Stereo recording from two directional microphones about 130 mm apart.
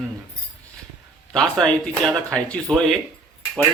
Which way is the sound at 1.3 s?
5° left (ahead or behind).